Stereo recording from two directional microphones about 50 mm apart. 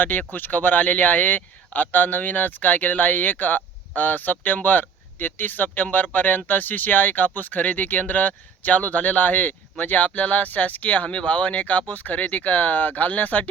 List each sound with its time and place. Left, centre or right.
0.0 s speech: left